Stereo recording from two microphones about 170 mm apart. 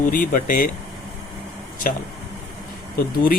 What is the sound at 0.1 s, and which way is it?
Speech, 55° left (ahead or behind).